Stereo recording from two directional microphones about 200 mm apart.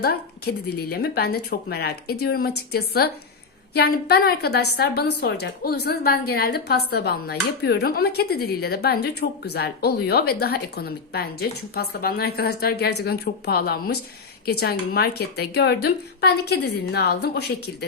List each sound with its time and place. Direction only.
0.0 s a woman's voice: 50° left (ahead or behind)